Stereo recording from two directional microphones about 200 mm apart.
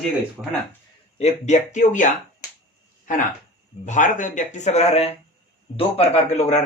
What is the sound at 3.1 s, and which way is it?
Speech, 40° left (ahead or behind).